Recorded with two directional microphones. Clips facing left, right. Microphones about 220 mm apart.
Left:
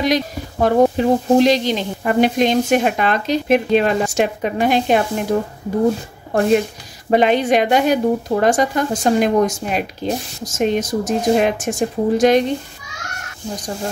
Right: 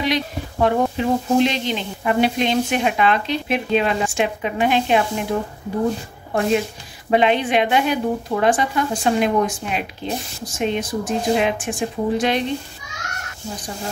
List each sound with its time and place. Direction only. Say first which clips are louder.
0.0 s speech: left 4 dB; 40° left (ahead or behind)
7.1 s speech: left 3 dB; 45° left (ahead or behind)